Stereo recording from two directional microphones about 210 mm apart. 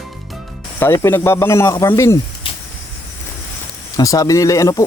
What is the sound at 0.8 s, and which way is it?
Speech, 15° left (ahead or behind).